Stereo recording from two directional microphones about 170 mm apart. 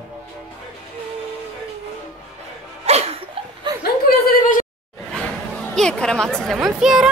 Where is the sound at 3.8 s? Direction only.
55° left (ahead or behind).